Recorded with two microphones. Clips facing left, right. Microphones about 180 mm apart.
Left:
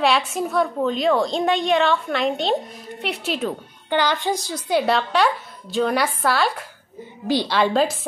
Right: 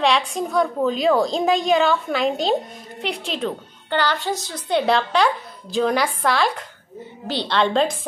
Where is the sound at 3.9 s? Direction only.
15° left (ahead or behind).